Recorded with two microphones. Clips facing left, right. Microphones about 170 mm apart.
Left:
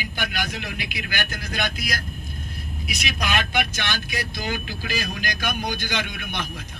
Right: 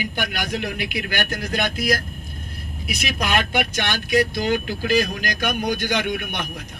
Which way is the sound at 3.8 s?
50° right (ahead or behind).